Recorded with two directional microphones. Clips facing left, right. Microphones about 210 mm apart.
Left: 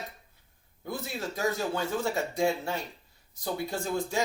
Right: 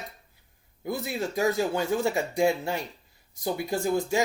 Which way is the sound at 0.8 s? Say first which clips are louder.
Right 5 dB; 10° right (ahead or behind).